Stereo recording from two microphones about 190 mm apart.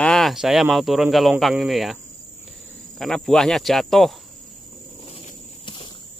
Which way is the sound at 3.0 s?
Centre (ahead or behind).